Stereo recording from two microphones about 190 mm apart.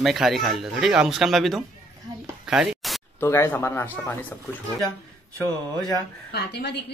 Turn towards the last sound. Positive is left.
turn(degrees=60)  # may be behind; listen again after turning